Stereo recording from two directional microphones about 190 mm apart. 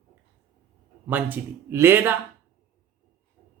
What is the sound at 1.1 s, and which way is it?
Speech, 10° right (ahead or behind).